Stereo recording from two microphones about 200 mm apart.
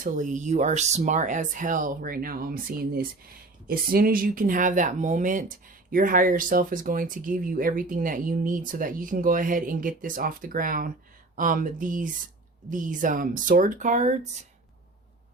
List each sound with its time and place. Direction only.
0.0 s speech: 40° right (ahead or behind)